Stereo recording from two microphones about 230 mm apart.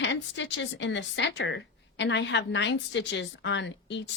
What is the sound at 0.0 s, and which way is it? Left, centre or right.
Speech, left.